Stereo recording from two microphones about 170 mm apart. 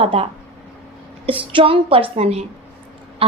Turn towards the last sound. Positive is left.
turn(degrees=-35)  # may be behind; listen again after turning